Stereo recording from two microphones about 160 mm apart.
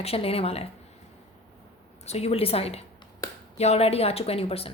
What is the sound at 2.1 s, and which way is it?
A woman's voice, 40° left (ahead or behind).